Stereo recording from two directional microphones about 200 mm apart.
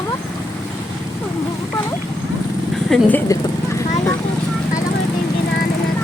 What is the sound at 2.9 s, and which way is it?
Speech, centre (ahead or behind).